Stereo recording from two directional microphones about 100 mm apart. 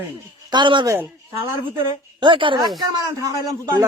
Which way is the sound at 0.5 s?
50° right (ahead or behind).